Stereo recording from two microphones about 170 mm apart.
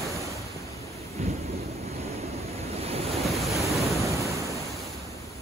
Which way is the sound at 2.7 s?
35° right (ahead or behind).